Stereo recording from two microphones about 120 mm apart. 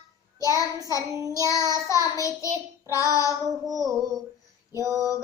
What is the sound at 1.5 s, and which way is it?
Child singing, 25° left (ahead or behind).